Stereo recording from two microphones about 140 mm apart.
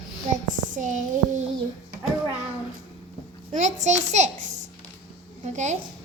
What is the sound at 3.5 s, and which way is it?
Speech, 60° right (ahead or behind).